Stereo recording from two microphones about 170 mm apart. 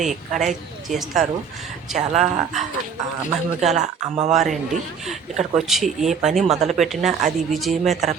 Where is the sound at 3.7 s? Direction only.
45° right (ahead or behind).